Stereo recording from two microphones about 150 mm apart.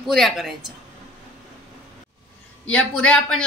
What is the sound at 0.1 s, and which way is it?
Speech, centre (ahead or behind).